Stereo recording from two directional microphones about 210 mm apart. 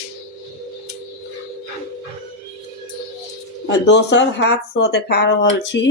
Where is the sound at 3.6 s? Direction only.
55° left (ahead or behind).